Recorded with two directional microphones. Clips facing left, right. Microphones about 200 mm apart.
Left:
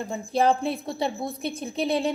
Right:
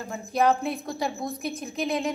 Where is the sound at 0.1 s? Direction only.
30° left (ahead or behind).